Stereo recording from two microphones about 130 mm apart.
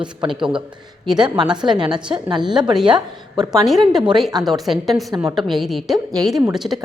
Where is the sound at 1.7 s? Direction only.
5° right (ahead or behind).